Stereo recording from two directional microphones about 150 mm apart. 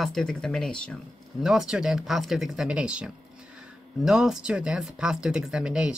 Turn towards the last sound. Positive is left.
turn(degrees=-5)  # may be behind; listen again after turning